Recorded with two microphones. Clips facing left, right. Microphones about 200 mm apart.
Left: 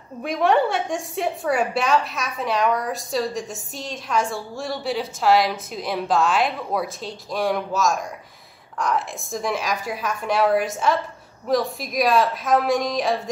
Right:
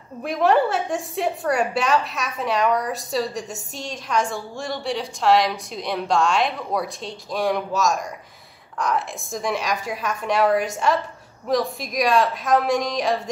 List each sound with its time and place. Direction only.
0.2 s a woman's voice: centre (ahead or behind)